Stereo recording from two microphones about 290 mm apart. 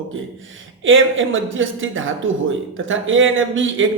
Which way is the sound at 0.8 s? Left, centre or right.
Right.